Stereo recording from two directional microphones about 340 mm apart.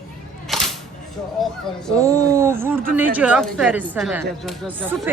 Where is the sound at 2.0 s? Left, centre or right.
Centre.